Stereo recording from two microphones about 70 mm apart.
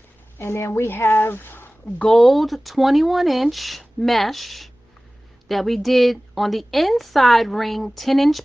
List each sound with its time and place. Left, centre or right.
0.4 s speech: left
2.0 s a woman's voice: centre